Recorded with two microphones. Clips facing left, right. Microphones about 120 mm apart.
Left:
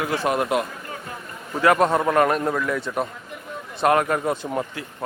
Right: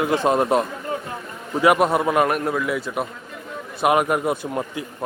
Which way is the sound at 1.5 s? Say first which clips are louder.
Right 1 dB; 10° right (ahead or behind).